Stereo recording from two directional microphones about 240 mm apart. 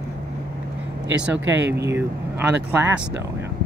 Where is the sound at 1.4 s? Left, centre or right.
Right.